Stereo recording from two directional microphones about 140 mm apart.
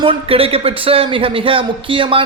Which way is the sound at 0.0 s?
40° right (ahead or behind).